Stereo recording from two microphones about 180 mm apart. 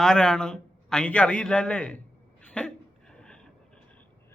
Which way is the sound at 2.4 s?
5° left (ahead or behind).